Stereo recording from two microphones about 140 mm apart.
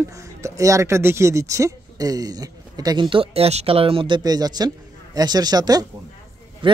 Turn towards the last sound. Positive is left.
turn(degrees=-40)  # may be behind; listen again after turning